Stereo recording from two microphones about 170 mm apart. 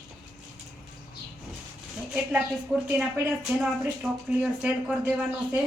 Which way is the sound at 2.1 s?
10° right (ahead or behind).